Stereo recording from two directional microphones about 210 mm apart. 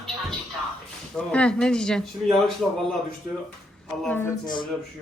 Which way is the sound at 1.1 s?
5° left (ahead or behind).